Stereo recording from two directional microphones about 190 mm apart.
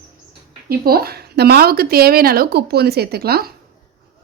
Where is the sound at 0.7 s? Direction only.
55° right (ahead or behind).